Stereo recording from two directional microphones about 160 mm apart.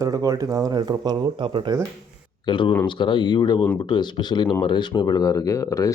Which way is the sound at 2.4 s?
30° left (ahead or behind).